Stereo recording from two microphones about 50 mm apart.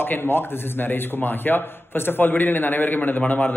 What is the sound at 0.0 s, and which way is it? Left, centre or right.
Speech, left.